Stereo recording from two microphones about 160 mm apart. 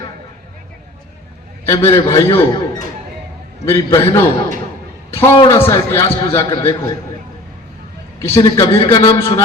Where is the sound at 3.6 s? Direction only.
20° left (ahead or behind).